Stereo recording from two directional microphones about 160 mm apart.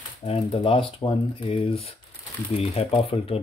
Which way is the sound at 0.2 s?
35° left (ahead or behind).